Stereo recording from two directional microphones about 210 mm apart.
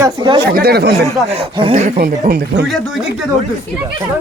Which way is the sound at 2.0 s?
45° right (ahead or behind).